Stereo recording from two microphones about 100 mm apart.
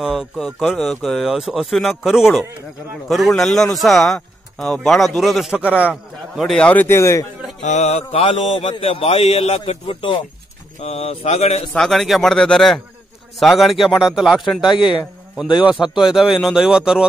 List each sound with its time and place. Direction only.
0.0 s speech: centre (ahead or behind)
5.5 s a man's voice: 15° right (ahead or behind)
6.3 s speech: centre (ahead or behind)
6.6 s speech: 15° left (ahead or behind)
7.0 s a man's voice: 30° left (ahead or behind)
7.9 s speech: 75° left (ahead or behind)
10.8 s speech: 90° left
11.7 s speech: 5° left (ahead or behind)
14.8 s speech: 55° left (ahead or behind)
15.9 s speech: 5° right (ahead or behind)